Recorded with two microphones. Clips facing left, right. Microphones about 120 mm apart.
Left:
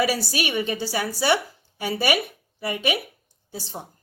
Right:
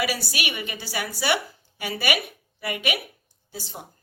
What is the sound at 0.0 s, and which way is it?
A woman's voice, 35° left (ahead or behind).